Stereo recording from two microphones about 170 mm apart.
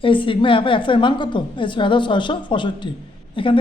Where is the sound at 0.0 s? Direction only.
30° left (ahead or behind).